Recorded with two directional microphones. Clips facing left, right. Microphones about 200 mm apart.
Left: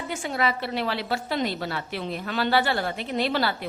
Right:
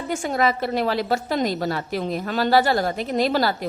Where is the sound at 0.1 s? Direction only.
45° right (ahead or behind).